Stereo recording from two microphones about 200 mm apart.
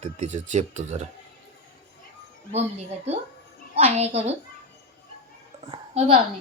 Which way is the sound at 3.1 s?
35° right (ahead or behind).